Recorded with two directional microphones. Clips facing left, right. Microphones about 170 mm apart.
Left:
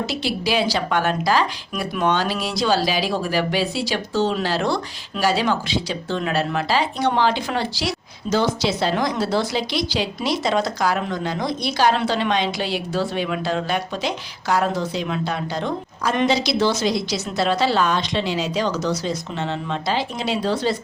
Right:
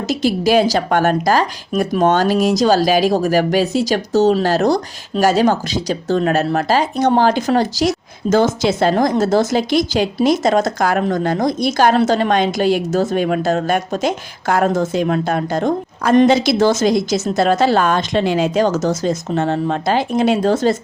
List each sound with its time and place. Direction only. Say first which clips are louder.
0.0 s speech: right 7 dB; 45° right (ahead or behind)